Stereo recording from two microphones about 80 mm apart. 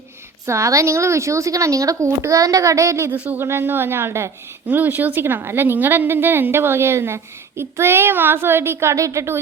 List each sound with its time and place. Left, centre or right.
0.4 s speech: right
3.1 s a woman's voice: right
4.7 s a woman's voice: right